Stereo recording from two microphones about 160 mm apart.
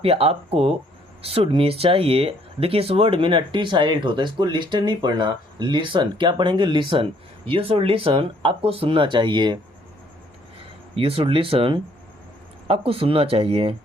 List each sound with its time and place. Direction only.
0.0 s speech: 35° right (ahead or behind)
10.9 s speech: 35° right (ahead or behind)